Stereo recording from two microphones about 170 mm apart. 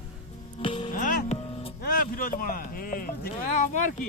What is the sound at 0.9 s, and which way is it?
Music, 55° left (ahead or behind).